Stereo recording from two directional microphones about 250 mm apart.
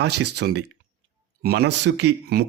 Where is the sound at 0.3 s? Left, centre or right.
Right.